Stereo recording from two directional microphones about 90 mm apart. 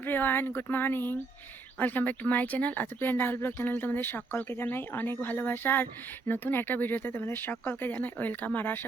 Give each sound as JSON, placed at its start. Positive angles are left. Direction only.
{"t": 0.0, "sound": "speech", "side_deg": 25}